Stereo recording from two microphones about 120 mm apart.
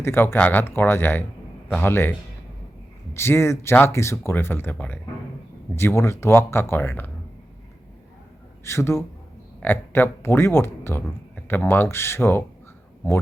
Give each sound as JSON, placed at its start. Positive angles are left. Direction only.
{"t": 0.0, "sound": "a man's voice", "side_deg": 20}
{"t": 3.2, "sound": "speech", "side_deg": 20}
{"t": 8.6, "sound": "speech", "side_deg": 20}